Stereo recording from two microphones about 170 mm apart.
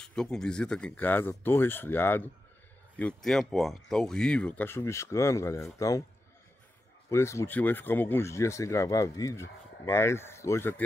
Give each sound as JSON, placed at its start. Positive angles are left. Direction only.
{"t": 0.0, "sound": "a man's voice", "side_deg": 5}
{"t": 7.1, "sound": "speech", "side_deg": 15}